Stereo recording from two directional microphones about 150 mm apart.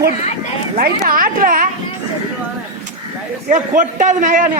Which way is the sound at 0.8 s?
70° right (ahead or behind).